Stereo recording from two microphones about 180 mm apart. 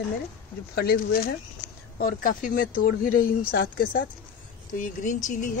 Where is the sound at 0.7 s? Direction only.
55° left (ahead or behind).